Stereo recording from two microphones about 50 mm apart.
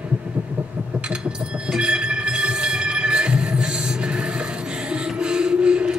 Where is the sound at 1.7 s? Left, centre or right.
Centre.